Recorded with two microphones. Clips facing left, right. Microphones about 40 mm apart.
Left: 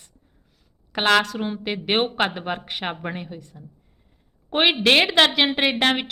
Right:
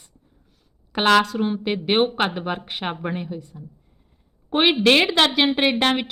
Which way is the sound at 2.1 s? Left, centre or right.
Centre.